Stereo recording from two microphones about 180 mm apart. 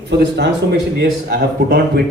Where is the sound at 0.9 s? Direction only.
65° right (ahead or behind).